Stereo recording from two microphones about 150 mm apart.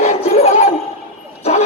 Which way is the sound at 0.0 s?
45° left (ahead or behind).